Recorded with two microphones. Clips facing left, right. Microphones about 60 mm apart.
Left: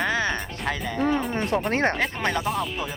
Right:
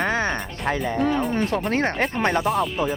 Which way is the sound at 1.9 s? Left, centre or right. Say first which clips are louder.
Right 3 dB; right.